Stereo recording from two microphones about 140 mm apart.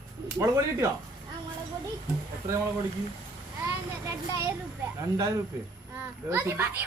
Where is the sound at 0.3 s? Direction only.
20° right (ahead or behind).